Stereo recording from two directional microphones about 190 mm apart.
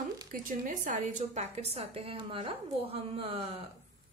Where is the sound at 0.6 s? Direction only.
40° right (ahead or behind).